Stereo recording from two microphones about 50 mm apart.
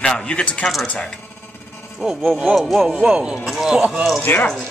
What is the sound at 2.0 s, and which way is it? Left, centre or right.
Speech, centre.